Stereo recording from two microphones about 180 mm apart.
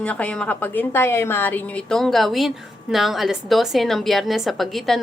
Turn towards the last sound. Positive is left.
turn(degrees=0)  # may be behind; listen again after turning